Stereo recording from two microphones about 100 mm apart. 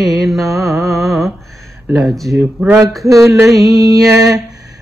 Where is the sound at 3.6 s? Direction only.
40° right (ahead or behind).